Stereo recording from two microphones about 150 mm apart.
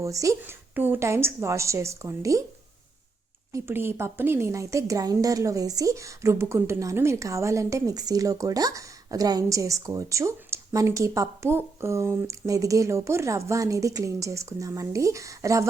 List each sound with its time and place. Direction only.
0.0 s speech: 20° right (ahead or behind)
3.5 s speech: 15° right (ahead or behind)